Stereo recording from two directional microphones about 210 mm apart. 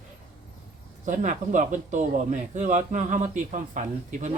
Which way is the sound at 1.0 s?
35° right (ahead or behind).